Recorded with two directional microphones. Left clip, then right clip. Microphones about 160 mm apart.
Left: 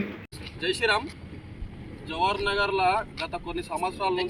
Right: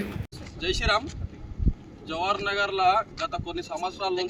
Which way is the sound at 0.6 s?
30° right (ahead or behind).